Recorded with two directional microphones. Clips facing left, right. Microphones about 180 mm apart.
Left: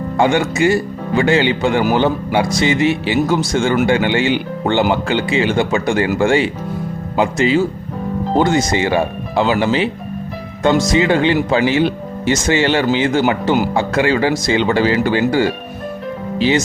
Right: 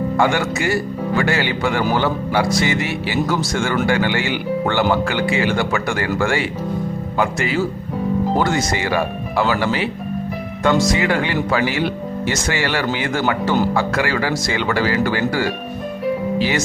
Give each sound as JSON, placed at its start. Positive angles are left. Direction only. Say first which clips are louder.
{"t": 0.2, "sound": "speech", "louder": "left 6 dB", "side_deg": 20}